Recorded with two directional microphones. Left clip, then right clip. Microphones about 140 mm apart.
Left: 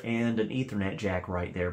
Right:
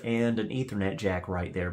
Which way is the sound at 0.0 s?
45° right (ahead or behind).